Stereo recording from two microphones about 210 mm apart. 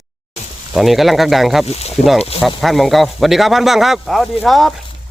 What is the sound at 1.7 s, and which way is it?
Speech, 30° left (ahead or behind).